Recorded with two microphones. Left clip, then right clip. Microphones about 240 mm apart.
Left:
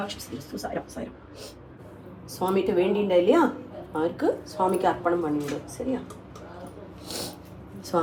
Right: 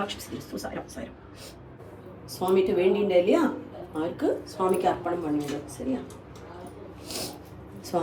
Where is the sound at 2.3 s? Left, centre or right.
Centre.